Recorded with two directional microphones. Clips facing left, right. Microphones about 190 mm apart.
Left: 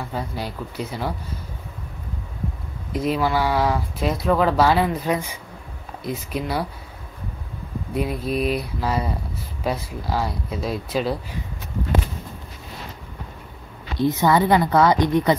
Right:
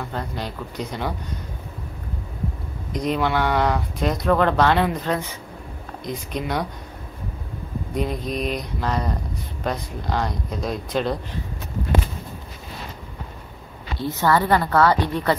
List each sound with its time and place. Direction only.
0.1 s speech: 10° left (ahead or behind)
2.9 s speech: 5° left (ahead or behind)
7.9 s speech: 5° left (ahead or behind)
13.9 s speech: 15° left (ahead or behind)